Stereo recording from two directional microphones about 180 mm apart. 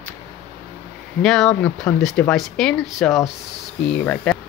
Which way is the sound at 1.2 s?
Centre (ahead or behind).